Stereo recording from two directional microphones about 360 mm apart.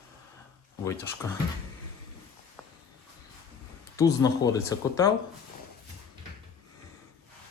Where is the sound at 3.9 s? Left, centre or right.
Centre.